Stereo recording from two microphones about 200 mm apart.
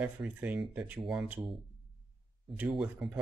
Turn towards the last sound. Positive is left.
turn(degrees=-5)  # may be behind; listen again after turning